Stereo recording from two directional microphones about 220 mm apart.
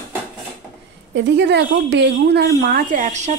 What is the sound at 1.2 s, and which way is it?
Speech, 55° right (ahead or behind).